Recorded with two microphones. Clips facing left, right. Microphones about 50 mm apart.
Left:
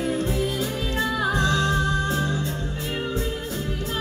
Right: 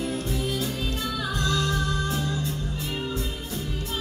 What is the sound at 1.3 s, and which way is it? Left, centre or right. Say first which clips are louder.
Music: left 2 dB; left.